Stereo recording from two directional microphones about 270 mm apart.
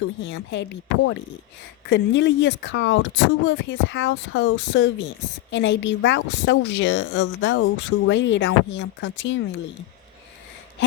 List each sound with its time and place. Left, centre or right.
0.2 s speech: left